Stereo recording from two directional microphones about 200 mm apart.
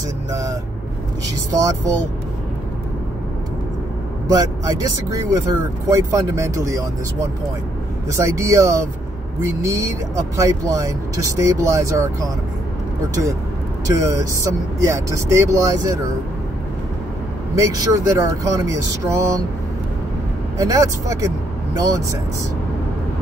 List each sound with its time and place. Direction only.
1.5 s speech: 15° right (ahead or behind)
4.3 s speech: 15° right (ahead or behind)
8.1 s speech: 15° right (ahead or behind)
13.8 s speech: 15° right (ahead or behind)
17.6 s speech: 15° right (ahead or behind)
20.5 s speech: 15° right (ahead or behind)